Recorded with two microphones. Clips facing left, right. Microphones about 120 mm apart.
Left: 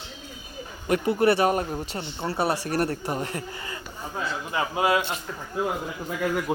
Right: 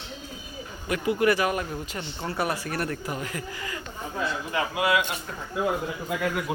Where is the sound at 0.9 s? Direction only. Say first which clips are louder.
Left 2 dB; 35° left (ahead or behind).